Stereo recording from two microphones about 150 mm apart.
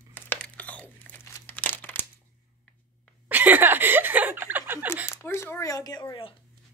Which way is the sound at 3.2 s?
10° right (ahead or behind).